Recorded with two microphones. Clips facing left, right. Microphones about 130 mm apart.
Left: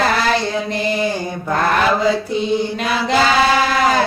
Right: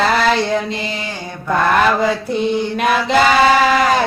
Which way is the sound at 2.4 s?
55° right (ahead or behind).